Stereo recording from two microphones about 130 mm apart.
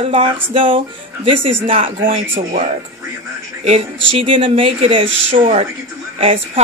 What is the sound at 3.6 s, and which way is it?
Speech, 50° right (ahead or behind).